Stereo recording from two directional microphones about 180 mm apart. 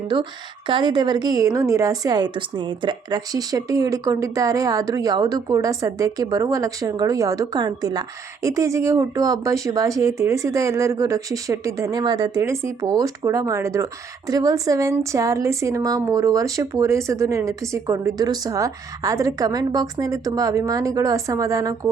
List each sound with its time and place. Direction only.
0.7 s a woman's voice: 25° right (ahead or behind)